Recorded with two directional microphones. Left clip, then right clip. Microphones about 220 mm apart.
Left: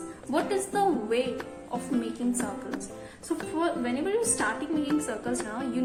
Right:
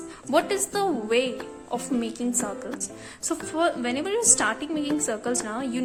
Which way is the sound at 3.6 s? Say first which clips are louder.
Right 5 dB; 45° right (ahead or behind).